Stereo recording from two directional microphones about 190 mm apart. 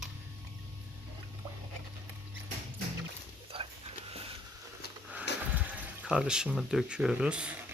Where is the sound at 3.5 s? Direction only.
30° right (ahead or behind).